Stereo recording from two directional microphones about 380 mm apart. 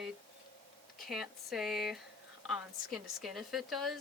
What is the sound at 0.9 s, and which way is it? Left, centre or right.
Speech, centre.